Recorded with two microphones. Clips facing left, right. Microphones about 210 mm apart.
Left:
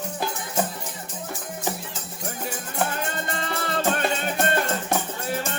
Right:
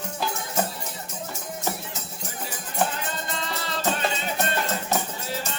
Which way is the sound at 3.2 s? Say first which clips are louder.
Left 3 dB; 55° left (ahead or behind).